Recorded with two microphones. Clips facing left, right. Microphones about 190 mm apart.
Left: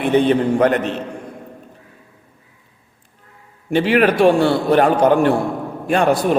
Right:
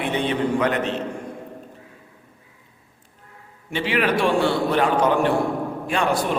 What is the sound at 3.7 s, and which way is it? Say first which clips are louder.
A man's voice: left 7 dB; 50° left (ahead or behind).